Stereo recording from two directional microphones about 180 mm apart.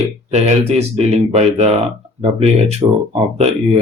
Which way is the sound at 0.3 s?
35° right (ahead or behind).